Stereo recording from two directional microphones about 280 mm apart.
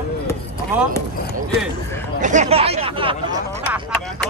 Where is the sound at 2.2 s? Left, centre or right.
Right.